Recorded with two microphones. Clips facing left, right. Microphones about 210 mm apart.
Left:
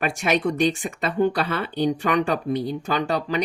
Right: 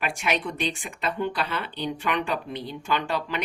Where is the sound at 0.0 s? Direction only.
45° left (ahead or behind).